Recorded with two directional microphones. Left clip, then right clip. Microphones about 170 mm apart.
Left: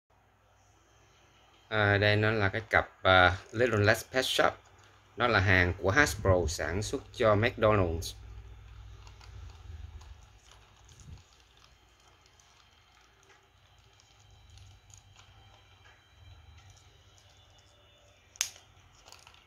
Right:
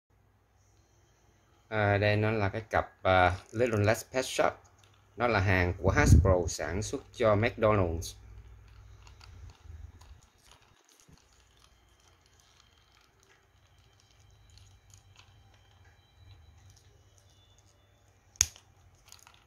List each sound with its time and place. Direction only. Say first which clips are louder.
1.7 s speech: left 1 dB; 5° right (ahead or behind)